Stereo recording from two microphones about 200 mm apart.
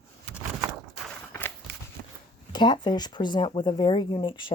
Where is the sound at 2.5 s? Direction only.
20° left (ahead or behind).